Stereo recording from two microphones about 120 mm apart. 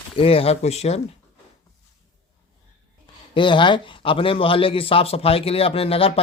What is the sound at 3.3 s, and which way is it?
Speech, 40° left (ahead or behind).